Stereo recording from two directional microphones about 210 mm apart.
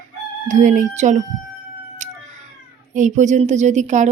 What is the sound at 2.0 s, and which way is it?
Cat, 35° right (ahead or behind).